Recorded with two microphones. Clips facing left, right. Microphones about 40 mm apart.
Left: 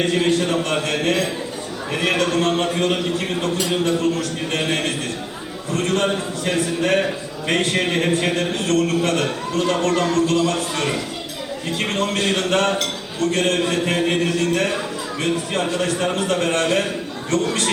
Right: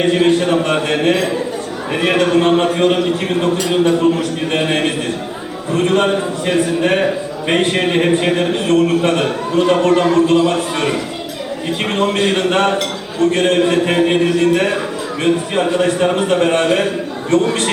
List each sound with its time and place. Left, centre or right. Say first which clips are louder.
0.0 s a man's voice: right 6 dB; right